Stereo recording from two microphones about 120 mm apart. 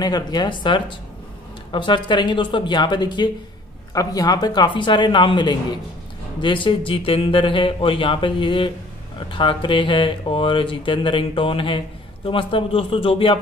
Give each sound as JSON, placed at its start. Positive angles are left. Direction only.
{"t": 0.0, "sound": "speech", "side_deg": 35}